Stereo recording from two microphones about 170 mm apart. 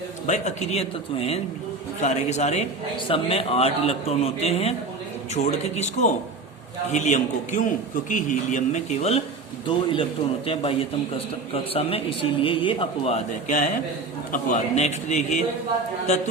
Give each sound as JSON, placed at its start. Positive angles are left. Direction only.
{"t": 0.3, "sound": "speech", "side_deg": 40}